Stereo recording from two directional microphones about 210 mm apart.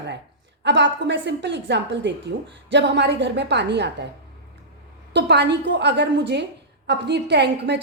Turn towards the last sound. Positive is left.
turn(degrees=-55)  # may be behind; listen again after turning